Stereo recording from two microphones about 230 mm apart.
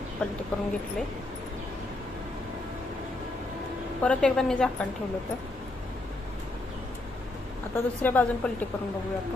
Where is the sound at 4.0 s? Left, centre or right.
Centre.